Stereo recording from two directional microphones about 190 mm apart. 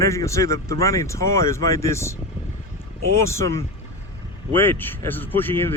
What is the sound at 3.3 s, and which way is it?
Speech, 15° left (ahead or behind).